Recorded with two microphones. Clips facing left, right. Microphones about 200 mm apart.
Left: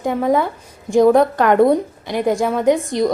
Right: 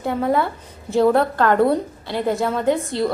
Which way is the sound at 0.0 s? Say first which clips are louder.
Left 3 dB; 15° left (ahead or behind).